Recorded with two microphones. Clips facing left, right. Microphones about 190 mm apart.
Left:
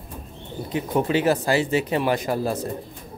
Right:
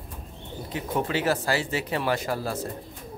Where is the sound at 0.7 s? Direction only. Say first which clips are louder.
Left 5 dB; 20° left (ahead or behind).